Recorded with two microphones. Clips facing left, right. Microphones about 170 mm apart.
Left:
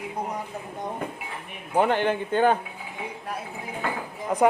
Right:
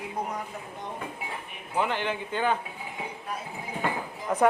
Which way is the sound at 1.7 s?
50° left (ahead or behind).